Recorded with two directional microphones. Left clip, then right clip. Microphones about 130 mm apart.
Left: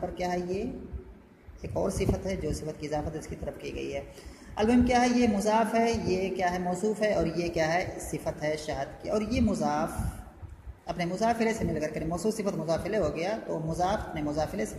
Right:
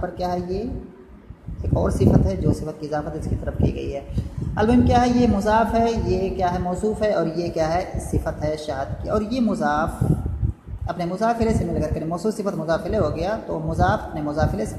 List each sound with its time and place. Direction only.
0.2 s a woman's voice: 15° left (ahead or behind)
1.8 s a woman's voice: 15° left (ahead or behind)
10.9 s a woman's voice: 15° left (ahead or behind)